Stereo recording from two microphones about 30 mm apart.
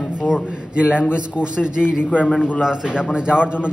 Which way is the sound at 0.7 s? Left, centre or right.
Right.